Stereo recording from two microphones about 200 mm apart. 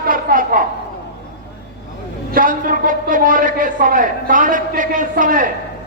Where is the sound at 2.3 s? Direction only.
45° right (ahead or behind).